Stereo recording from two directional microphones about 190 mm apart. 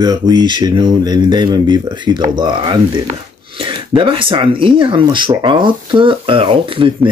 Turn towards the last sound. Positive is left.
turn(degrees=-25)  # may be behind; listen again after turning